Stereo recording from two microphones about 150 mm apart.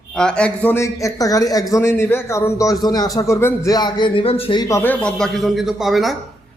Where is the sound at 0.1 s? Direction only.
5° left (ahead or behind); by 4.6 s 40° left (ahead or behind).